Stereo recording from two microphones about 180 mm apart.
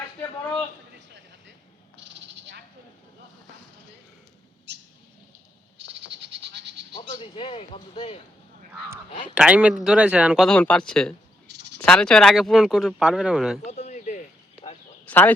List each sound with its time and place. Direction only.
0.2 s a sound: 10° left (ahead or behind)
4.7 s bird: 75° right (ahead or behind)
6.2 s goat: 75° right (ahead or behind)
6.9 s a man's voice: 30° left (ahead or behind)
9.3 s speech: 5° right (ahead or behind)
13.7 s a sound: 40° left (ahead or behind)
15.0 s speech: 10° left (ahead or behind)